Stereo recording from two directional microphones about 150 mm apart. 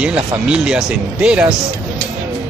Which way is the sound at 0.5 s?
5° right (ahead or behind).